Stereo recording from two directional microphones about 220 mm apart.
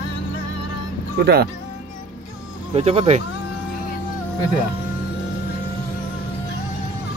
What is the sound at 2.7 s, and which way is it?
Speech, 30° right (ahead or behind).